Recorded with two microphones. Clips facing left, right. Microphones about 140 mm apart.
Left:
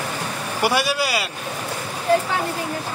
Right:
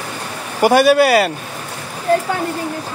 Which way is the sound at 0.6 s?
50° right (ahead or behind).